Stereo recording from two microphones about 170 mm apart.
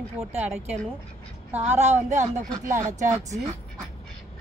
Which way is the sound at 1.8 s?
45° right (ahead or behind).